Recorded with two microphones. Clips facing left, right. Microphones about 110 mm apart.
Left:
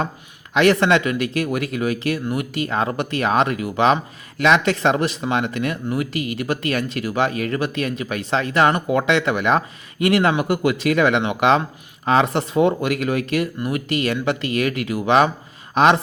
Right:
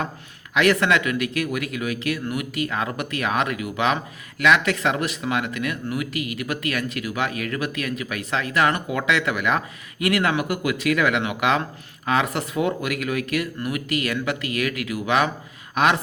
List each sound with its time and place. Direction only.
0.5 s speech: 30° left (ahead or behind)